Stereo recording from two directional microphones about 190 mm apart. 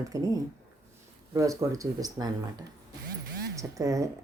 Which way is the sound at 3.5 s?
15° right (ahead or behind).